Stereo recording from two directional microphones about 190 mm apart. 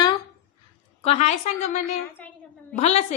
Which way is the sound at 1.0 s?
35° left (ahead or behind).